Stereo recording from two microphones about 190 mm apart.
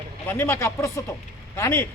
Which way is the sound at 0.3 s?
10° left (ahead or behind).